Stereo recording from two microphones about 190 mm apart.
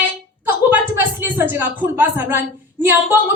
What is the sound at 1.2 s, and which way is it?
A woman's voice, 10° right (ahead or behind).